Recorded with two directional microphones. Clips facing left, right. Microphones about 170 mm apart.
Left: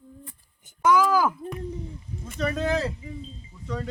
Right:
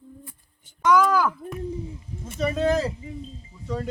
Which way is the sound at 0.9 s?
5° left (ahead or behind).